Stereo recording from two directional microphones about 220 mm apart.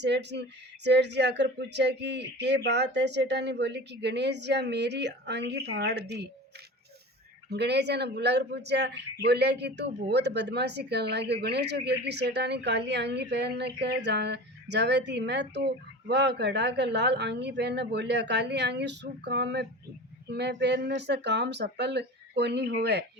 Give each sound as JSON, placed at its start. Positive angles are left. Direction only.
{"t": 0.0, "sound": "a man's voice", "side_deg": -50}
{"t": 7.5, "sound": "a man's voice", "side_deg": -50}